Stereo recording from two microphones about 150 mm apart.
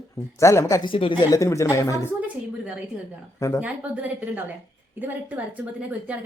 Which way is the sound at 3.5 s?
10° right (ahead or behind).